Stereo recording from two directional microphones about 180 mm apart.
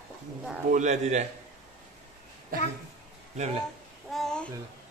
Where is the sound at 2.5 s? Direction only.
50° right (ahead or behind).